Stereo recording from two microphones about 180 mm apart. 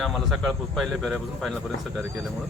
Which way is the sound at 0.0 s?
Centre (ahead or behind).